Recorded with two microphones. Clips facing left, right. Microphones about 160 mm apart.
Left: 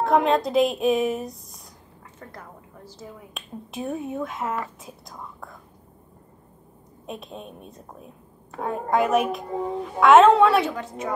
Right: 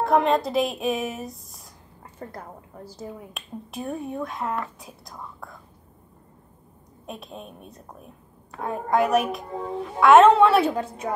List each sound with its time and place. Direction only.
0.0 s speech: centre (ahead or behind)
2.1 s a woman's voice: 35° right (ahead or behind)
3.3 s speech: centre (ahead or behind)
7.1 s speech: centre (ahead or behind)
10.6 s a woman's voice: 30° right (ahead or behind)